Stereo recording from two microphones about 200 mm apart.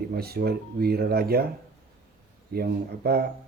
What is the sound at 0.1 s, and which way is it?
Speech, 50° right (ahead or behind).